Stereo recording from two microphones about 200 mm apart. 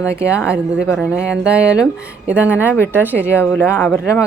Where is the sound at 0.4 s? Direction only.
5° right (ahead or behind).